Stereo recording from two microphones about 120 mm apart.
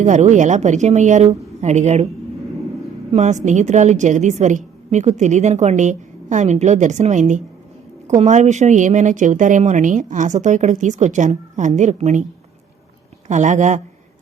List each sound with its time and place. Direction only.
0.0 s a woman's voice: 85° right
1.6 s speech: 70° right (ahead or behind)
3.1 s a woman's voice: 80° right
8.0 s speech: 75° right (ahead or behind)
13.2 s speech: 90° right